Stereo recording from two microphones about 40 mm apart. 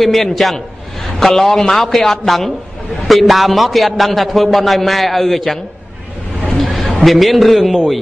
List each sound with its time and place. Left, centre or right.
0.0 s a man's voice: centre
6.6 s a man's voice: centre